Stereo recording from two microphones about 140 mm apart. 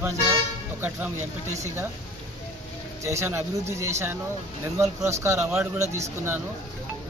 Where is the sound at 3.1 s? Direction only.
20° right (ahead or behind).